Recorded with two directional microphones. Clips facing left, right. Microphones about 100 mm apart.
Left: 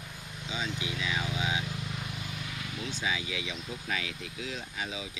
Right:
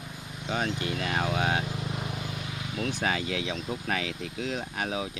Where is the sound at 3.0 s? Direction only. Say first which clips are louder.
Right 4 dB; 60° right (ahead or behind).